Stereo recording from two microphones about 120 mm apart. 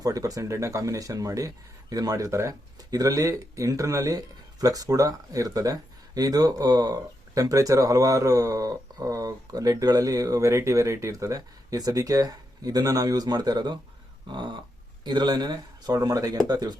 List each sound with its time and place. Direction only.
0.0 s speech: 30° right (ahead or behind)